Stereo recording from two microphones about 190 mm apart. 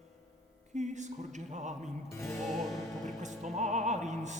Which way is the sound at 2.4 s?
Centre (ahead or behind).